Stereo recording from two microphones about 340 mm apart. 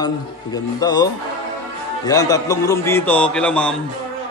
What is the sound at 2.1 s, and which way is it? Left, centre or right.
A man's voice, centre.